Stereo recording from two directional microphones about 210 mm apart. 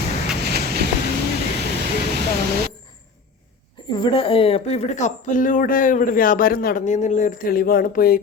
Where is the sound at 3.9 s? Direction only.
20° left (ahead or behind); by 8.2 s 40° left (ahead or behind).